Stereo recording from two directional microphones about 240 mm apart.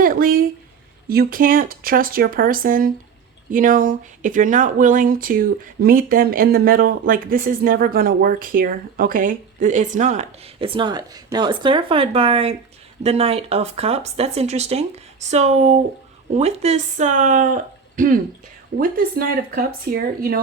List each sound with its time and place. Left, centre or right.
0.0 s speech: right